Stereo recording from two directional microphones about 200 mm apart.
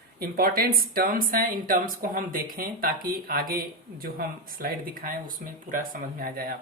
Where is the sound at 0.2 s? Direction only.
50° right (ahead or behind).